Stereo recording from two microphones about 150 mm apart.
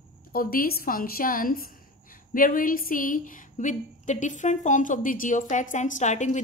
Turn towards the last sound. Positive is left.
turn(degrees=50)  # may be behind; listen again after turning